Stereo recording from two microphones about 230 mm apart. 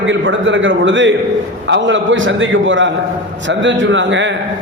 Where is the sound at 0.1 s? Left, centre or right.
Right.